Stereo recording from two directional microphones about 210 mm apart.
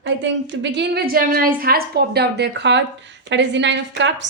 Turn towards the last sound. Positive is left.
turn(degrees=-60)  # may be behind; listen again after turning